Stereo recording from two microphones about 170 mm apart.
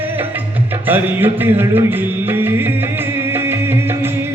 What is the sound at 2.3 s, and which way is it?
Music, 15° right (ahead or behind).